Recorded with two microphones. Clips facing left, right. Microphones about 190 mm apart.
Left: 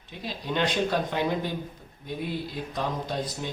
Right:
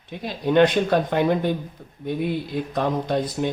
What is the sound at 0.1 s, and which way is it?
Speech, 55° right (ahead or behind).